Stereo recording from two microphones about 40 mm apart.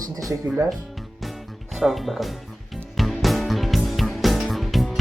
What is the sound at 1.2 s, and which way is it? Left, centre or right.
Music, centre.